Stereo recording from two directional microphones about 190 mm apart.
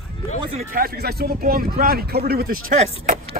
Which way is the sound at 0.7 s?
55° right (ahead or behind).